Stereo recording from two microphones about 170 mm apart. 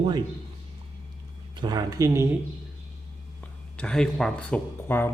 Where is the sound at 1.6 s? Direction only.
20° right (ahead or behind).